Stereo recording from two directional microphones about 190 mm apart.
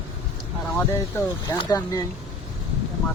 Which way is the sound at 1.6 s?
20° left (ahead or behind).